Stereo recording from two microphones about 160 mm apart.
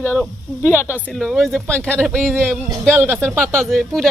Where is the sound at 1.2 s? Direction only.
Centre (ahead or behind).